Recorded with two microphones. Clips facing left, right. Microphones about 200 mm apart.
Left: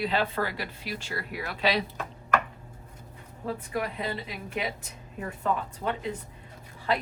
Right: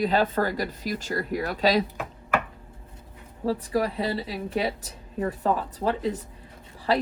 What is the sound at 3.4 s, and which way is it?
Speech, 35° right (ahead or behind).